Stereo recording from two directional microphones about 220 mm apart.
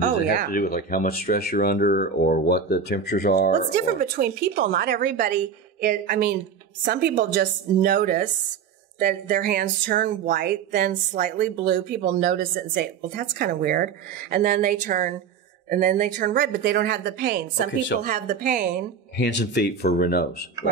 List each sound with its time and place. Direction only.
0.5 s speech: 40° left (ahead or behind)
3.7 s a woman's voice: 40° right (ahead or behind)
18.0 s speech: 35° right (ahead or behind)
19.1 s speech: 50° left (ahead or behind)